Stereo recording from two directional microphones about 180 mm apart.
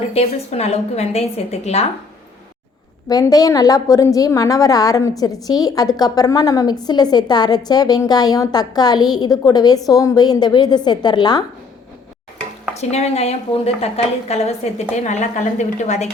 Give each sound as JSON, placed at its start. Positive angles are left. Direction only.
{"t": 0.1, "sound": "a woman's voice", "side_deg": 35}
{"t": 3.1, "sound": "a woman's voice", "side_deg": 20}
{"t": 12.7, "sound": "a woman's voice", "side_deg": 35}